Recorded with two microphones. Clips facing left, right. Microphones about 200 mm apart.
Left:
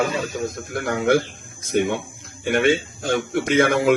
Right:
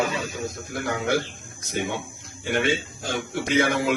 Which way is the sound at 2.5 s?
55° left (ahead or behind).